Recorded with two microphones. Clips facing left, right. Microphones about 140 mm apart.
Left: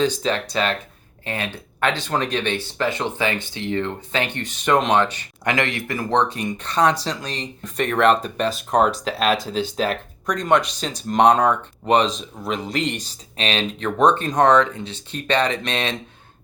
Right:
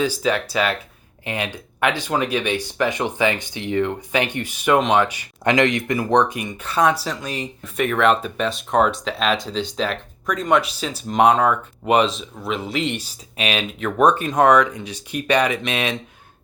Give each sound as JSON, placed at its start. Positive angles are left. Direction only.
{"t": 0.0, "sound": "speech", "side_deg": -10}